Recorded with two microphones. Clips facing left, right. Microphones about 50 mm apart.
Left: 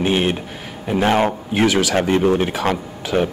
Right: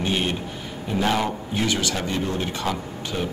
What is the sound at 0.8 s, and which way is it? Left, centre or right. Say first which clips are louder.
Speech: left 6 dB; left.